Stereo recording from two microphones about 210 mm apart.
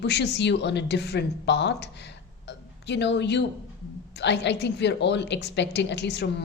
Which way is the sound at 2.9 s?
55° left (ahead or behind).